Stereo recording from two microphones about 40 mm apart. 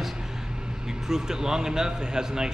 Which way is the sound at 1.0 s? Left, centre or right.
Centre.